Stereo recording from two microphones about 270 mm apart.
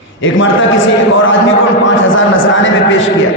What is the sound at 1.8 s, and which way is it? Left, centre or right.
A man's voice, left.